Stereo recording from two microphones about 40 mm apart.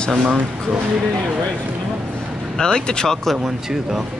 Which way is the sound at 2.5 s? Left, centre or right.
Centre.